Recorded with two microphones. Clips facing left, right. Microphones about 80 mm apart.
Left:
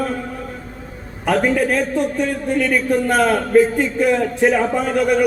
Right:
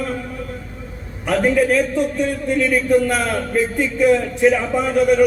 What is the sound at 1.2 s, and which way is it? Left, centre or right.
A man's voice, left.